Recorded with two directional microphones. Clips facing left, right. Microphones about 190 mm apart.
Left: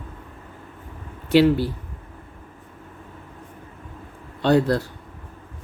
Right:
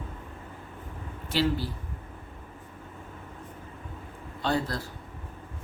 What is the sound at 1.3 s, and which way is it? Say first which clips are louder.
Speech: left 11 dB; 65° left (ahead or behind).